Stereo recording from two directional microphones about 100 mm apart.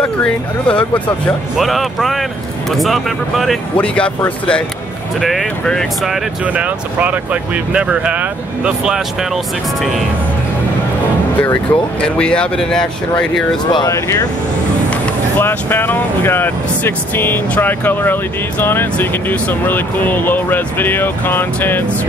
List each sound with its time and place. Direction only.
0.0 s speech: 10° left (ahead or behind)
1.6 s speech: centre (ahead or behind)
3.7 s speech: 10° left (ahead or behind)
5.2 s speech: centre (ahead or behind)
6.4 s speech: 15° right (ahead or behind)
11.4 s speech: 10° left (ahead or behind)
13.8 s speech: 30° left (ahead or behind)
15.3 s speech: 20° left (ahead or behind)